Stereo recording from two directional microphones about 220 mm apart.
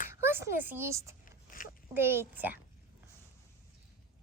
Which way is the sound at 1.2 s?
40° left (ahead or behind).